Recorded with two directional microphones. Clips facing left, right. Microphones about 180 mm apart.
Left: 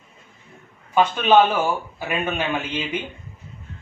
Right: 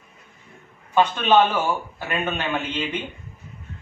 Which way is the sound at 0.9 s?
10° left (ahead or behind).